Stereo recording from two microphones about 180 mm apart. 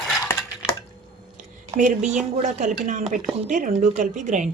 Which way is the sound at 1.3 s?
45° right (ahead or behind).